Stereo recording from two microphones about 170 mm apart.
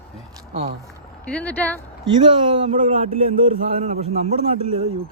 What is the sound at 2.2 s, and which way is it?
A man's voice, 40° right (ahead or behind).